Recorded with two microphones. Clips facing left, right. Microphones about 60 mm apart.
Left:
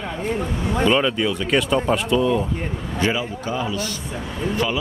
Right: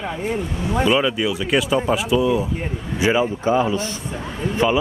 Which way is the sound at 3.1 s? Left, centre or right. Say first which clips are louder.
Right 7 dB; right.